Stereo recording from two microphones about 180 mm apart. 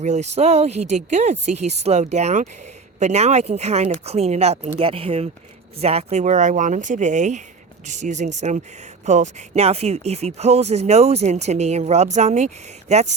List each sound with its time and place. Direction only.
0.0 s speech: 40° right (ahead or behind)